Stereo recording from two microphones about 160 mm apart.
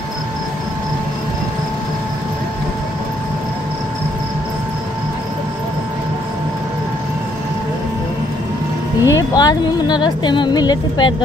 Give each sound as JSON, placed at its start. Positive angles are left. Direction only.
{"t": 9.0, "sound": "speech", "side_deg": 25}